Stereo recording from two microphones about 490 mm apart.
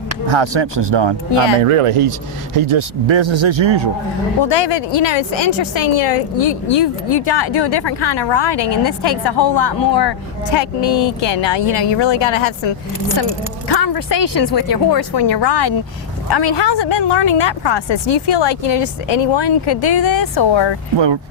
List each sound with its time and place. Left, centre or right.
0.3 s speech: right
1.6 s speech: right
2.6 s speech: right
4.4 s speech: left
6.7 s speech: left
13.7 s speech: left
19.0 s speech: left
19.4 s speech: left